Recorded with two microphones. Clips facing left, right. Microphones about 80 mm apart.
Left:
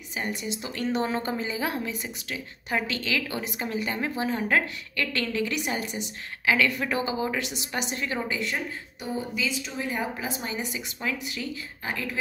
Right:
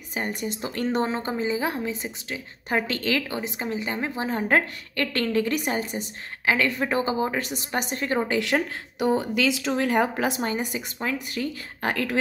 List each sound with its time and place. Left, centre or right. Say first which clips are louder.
0.1 s a woman's voice: right 2 dB; right
1.1 s a woman's voice: right 3 dB; right
2.9 s speech: right 4 dB; right
3.3 s a woman's voice: right 2 dB; right
4.3 s a woman's voice: right 4 dB; right
8.3 s speech: right 6 dB; right
10.4 s speech: right 5 dB; right
11.8 s speech: right 7 dB; right